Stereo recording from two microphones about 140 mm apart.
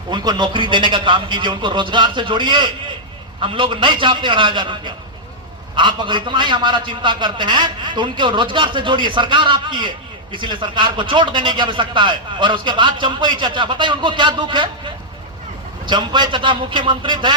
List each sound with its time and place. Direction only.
0.1 s a man's voice: 30° right (ahead or behind)